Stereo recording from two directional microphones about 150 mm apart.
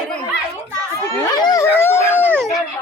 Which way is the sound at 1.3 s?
25° left (ahead or behind).